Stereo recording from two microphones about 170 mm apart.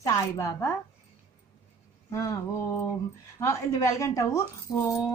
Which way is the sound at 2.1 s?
15° left (ahead or behind).